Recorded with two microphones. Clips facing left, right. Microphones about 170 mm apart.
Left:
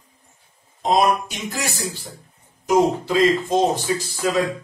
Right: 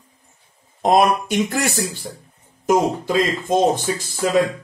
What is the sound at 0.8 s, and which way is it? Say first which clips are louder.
Speech: right 3 dB; 60° right (ahead or behind).